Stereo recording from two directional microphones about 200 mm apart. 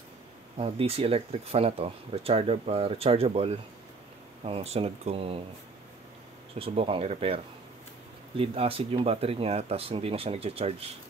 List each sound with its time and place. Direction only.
0.6 s speech: 30° right (ahead or behind)
6.6 s speech: 30° right (ahead or behind)